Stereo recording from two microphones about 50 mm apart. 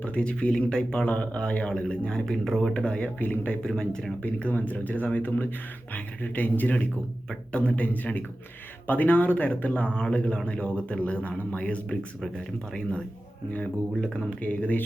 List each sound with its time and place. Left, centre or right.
0.0 s speech: left
1.0 s speech: left
3.2 s speech: left
3.6 s speech: centre
4.2 s speech: left
14.0 s speech: centre
14.3 s speech: left